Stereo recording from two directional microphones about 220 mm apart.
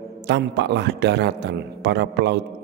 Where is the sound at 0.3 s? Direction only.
50° right (ahead or behind).